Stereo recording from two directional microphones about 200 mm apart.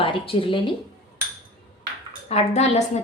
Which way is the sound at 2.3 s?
35° left (ahead or behind).